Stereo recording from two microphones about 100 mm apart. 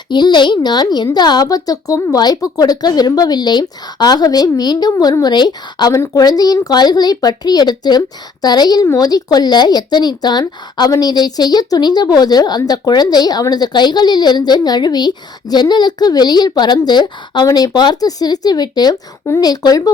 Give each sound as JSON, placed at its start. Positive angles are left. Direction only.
{"t": 0.1, "sound": "a woman's voice", "side_deg": 50}